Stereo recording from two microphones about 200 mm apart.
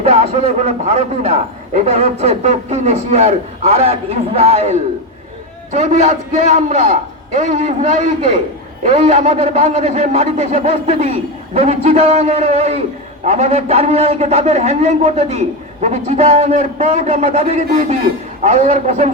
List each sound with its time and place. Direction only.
0.0 s a man's voice: 30° right (ahead or behind)